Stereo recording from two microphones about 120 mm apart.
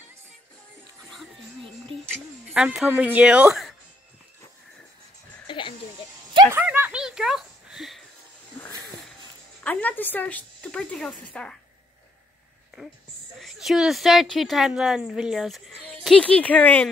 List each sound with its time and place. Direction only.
2.4 s speech: 10° right (ahead or behind)
5.5 s frog: 45° left (ahead or behind)
6.5 s a sound: 15° right (ahead or behind)
9.6 s a sound: 15° left (ahead or behind)
13.4 s a woman's voice: centre (ahead or behind)
16.3 s speech: 10° left (ahead or behind)